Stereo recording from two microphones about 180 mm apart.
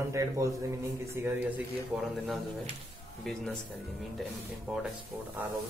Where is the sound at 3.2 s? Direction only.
5° left (ahead or behind).